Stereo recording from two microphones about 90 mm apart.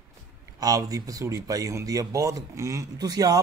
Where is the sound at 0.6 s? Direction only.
40° right (ahead or behind).